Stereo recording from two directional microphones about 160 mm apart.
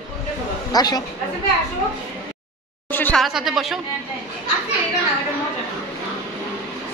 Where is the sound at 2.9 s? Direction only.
10° left (ahead or behind).